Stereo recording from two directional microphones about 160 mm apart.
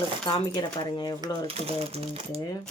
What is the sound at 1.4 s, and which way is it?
Speech, 35° right (ahead or behind).